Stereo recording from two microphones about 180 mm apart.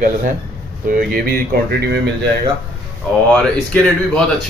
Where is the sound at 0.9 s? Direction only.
55° right (ahead or behind).